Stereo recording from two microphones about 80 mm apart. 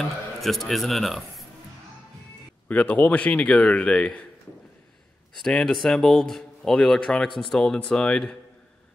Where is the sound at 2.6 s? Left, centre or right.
Centre.